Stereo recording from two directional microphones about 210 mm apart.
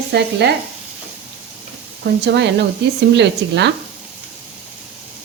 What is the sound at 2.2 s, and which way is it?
Speech, 55° right (ahead or behind).